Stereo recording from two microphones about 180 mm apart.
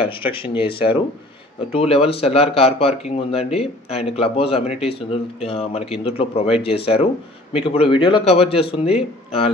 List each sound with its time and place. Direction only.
0.0 s a man's voice: 30° left (ahead or behind)